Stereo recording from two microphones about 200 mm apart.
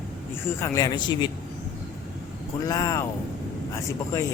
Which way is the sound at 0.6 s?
15° left (ahead or behind).